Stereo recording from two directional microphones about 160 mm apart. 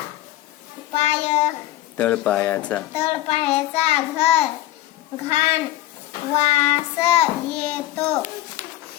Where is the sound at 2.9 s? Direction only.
40° left (ahead or behind).